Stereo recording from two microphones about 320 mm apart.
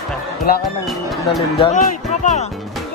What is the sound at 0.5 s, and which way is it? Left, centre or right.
Speech, left.